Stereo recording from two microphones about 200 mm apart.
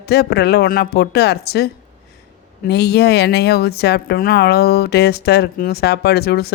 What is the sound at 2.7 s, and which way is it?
Speech, 55° left (ahead or behind).